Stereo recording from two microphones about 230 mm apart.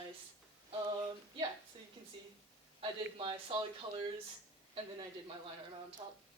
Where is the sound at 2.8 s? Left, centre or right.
Right.